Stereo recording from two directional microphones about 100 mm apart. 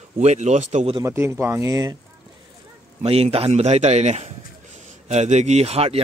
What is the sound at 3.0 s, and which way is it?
A man's voice, 90° right.